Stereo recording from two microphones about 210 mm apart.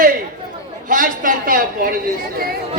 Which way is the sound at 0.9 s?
40° right (ahead or behind).